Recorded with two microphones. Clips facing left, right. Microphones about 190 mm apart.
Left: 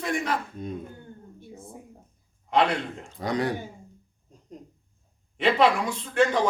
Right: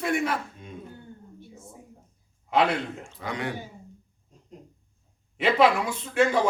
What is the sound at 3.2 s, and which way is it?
Speech, 35° left (ahead or behind).